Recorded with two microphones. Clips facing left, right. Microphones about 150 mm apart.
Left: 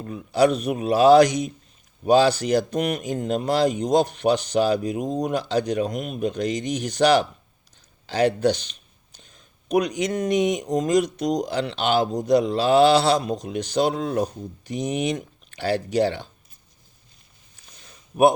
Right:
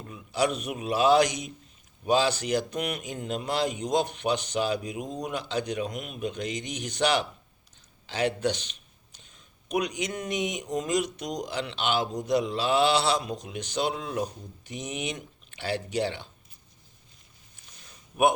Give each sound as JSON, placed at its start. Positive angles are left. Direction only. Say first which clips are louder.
{"t": 0.0, "sound": "speech", "louder": "left 8 dB", "side_deg": 40}